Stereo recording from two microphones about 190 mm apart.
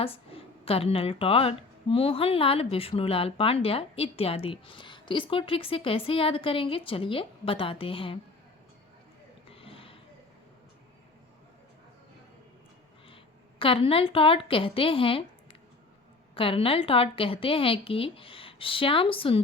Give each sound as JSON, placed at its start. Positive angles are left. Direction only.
{"t": 0.0, "sound": "a woman's voice", "side_deg": 30}
{"t": 9.5, "sound": "a sound", "side_deg": 30}
{"t": 13.6, "sound": "a woman's voice", "side_deg": 30}
{"t": 16.3, "sound": "a woman's voice", "side_deg": 30}